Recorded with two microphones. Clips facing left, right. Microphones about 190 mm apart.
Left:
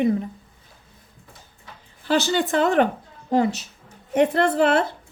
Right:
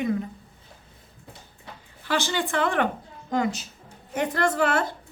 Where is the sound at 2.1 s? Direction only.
40° left (ahead or behind).